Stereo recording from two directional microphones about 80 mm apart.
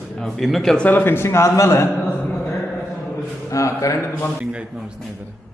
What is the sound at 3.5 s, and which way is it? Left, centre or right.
Speech, left.